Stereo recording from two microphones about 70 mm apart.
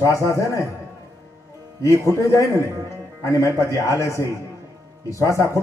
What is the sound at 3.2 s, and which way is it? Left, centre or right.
A man's voice, left.